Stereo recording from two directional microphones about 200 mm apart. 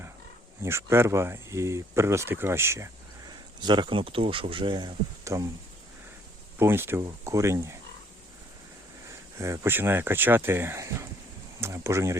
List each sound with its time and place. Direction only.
0.6 s speech: 15° right (ahead or behind)
6.6 s speech: 10° right (ahead or behind)
9.4 s speech: 15° right (ahead or behind)